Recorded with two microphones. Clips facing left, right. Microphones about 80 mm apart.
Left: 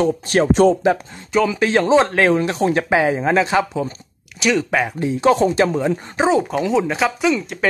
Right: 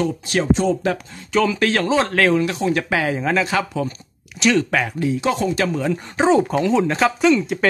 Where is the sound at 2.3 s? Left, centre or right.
Left.